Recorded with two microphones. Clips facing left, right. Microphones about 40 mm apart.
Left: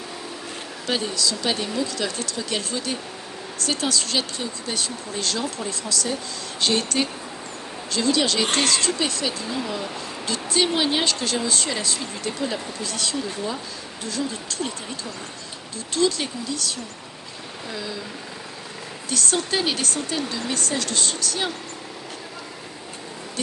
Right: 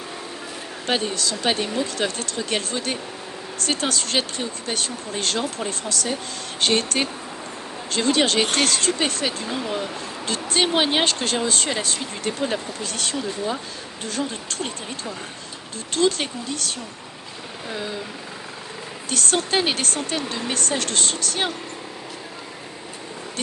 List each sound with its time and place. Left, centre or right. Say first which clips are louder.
0.9 s speech: right 1 dB; right
16.0 s speech: right 1 dB; right
19.1 s speech: right 2 dB; right